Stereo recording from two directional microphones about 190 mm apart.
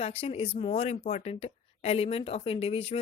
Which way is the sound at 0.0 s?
30° left (ahead or behind).